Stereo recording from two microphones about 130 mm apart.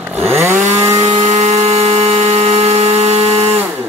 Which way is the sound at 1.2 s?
65° right (ahead or behind).